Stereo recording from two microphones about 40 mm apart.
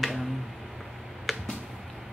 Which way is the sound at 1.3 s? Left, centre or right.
Centre.